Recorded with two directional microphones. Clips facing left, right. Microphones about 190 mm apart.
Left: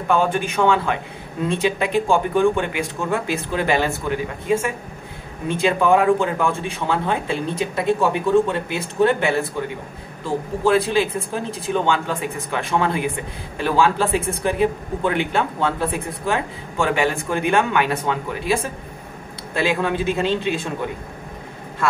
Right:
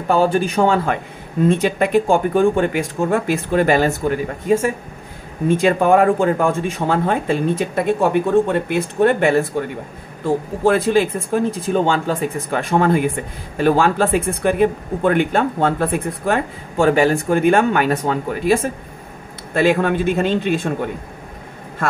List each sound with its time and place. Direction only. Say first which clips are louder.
0.1 s speech: right 4 dB; 40° right (ahead or behind)